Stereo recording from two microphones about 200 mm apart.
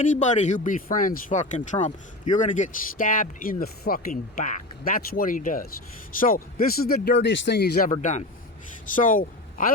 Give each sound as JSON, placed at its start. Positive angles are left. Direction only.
{"t": 0.0, "sound": "speech", "side_deg": 35}
{"t": 9.0, "sound": "speech", "side_deg": 40}